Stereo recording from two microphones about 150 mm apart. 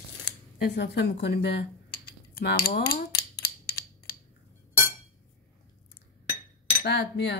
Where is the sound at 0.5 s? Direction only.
90° left.